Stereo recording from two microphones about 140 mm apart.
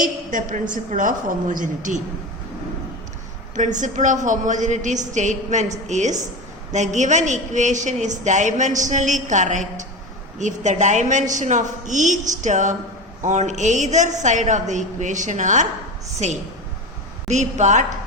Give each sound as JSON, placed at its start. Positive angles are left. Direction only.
{"t": 0.0, "sound": "a woman's voice", "side_deg": -70}
{"t": 3.5, "sound": "a woman's voice", "side_deg": -60}